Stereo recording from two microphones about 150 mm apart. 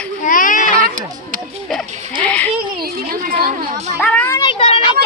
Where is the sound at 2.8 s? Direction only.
70° right (ahead or behind).